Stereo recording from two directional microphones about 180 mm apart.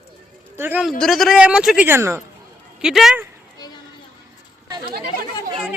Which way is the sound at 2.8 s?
5° right (ahead or behind).